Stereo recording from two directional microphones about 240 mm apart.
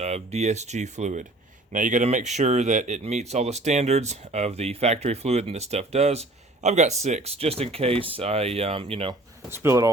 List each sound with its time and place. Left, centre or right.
0.0 s speech: right
9.5 s speech: centre